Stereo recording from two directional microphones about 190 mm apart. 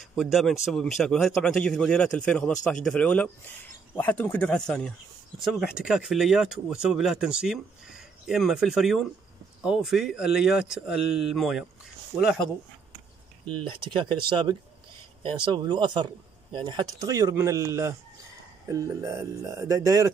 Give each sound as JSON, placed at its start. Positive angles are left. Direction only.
{"t": 0.1, "sound": "speech", "side_deg": 0}
{"t": 13.7, "sound": "speech", "side_deg": -25}